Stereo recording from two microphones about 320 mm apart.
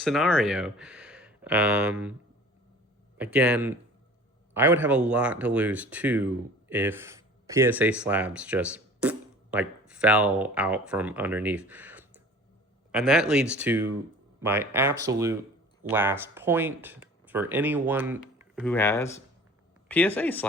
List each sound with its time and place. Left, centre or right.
0.0 s speech: centre
3.2 s speech: centre
14.9 s speech: right
15.8 s speech: centre